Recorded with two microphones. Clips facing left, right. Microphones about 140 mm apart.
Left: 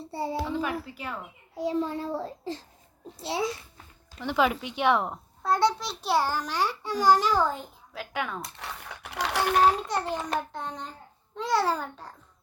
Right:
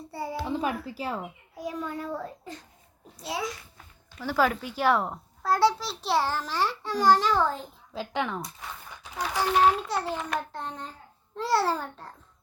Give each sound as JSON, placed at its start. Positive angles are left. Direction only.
{"t": 0.1, "sound": "a sound", "side_deg": 25}
{"t": 0.4, "sound": "a sound", "side_deg": -25}
{"t": 0.9, "sound": "speech", "side_deg": -30}
{"t": 1.5, "sound": "a child's voice", "side_deg": 25}
{"t": 4.8, "sound": "a child's voice", "side_deg": 0}
{"t": 7.9, "sound": "speech", "side_deg": -20}
{"t": 8.5, "sound": "typing", "side_deg": 75}
{"t": 10.1, "sound": "a sound", "side_deg": 30}
{"t": 10.5, "sound": "a child's voice", "side_deg": 0}